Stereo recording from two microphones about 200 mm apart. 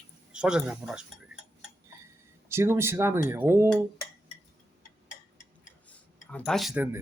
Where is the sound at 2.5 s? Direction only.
10° right (ahead or behind).